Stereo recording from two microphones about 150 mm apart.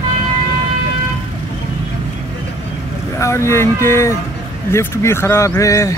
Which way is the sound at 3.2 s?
20° left (ahead or behind).